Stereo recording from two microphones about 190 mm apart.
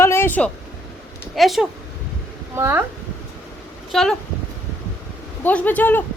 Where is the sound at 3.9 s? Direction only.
Centre (ahead or behind).